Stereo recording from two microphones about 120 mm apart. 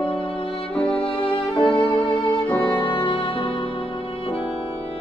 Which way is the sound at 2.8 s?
45° left (ahead or behind).